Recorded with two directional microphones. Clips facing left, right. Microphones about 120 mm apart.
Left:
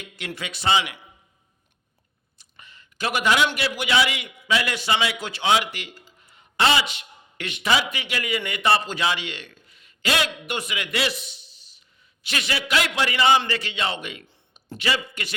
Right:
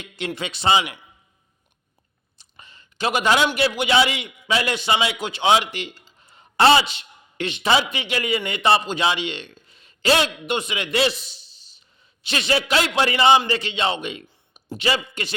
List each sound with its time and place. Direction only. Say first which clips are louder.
0.3 s a man's voice: right 3 dB; 25° right (ahead or behind)
2.4 s a man's voice: right 1 dB; 30° right (ahead or behind)
14.3 s a sound: right 5 dB; 10° right (ahead or behind)
14.8 s a man's voice: right 3 dB; 25° right (ahead or behind)